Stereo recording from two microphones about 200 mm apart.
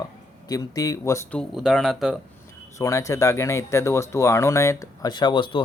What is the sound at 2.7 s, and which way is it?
Speech, 15° left (ahead or behind).